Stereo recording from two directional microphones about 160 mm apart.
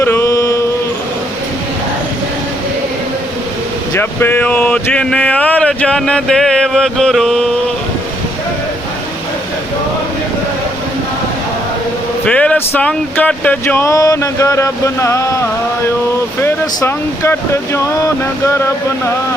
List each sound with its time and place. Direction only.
0.0 s a sound: 15° left (ahead or behind)
3.9 s speech: 15° left (ahead or behind)
12.2 s speech: 5° left (ahead or behind)
16.4 s speech: 15° left (ahead or behind)